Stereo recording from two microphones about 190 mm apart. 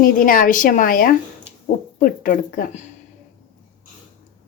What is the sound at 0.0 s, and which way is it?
A woman's voice, 50° left (ahead or behind).